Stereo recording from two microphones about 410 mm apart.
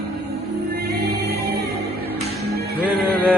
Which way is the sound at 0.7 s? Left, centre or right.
Right.